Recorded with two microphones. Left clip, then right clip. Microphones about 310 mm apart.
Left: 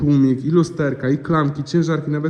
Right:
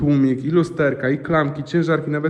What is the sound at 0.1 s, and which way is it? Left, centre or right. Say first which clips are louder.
A man's voice: left 2 dB; centre.